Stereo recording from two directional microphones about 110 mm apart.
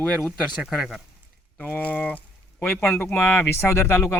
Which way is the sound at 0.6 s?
5° right (ahead or behind).